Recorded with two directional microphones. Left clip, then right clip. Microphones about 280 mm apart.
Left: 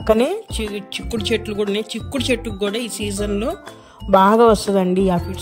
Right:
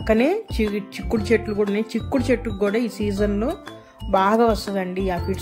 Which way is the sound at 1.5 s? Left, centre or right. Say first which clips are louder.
Left 1 dB; centre.